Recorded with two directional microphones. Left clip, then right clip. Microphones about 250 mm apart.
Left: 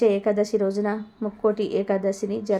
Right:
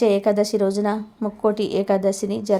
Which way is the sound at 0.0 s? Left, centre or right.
Centre.